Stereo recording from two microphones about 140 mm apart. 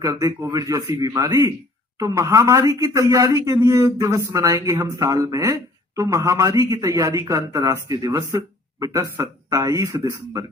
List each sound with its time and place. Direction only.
0.0 s speech: 25° right (ahead or behind)